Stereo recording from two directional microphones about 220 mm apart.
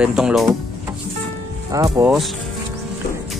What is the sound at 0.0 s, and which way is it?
Speech, centre (ahead or behind).